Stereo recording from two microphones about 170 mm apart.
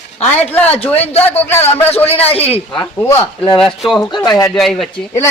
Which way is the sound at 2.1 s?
35° left (ahead or behind).